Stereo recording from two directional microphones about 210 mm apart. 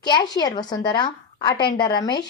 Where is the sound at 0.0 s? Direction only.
20° left (ahead or behind).